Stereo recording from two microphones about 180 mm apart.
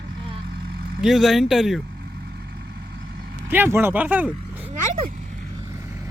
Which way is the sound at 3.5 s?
10° right (ahead or behind).